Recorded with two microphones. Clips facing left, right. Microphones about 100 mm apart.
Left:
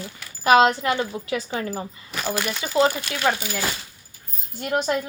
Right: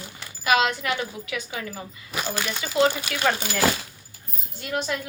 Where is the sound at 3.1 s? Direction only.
5° right (ahead or behind).